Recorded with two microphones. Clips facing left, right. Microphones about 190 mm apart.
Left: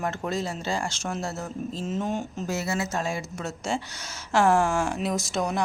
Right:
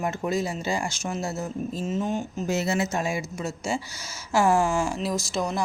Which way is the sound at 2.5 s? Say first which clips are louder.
Right 4 dB; 20° right (ahead or behind).